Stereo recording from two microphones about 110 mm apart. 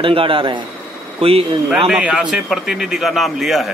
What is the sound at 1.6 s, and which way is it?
A man's voice, 5° right (ahead or behind).